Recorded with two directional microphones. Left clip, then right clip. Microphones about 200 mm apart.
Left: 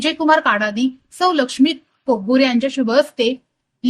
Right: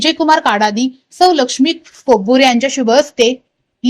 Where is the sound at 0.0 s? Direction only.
20° right (ahead or behind).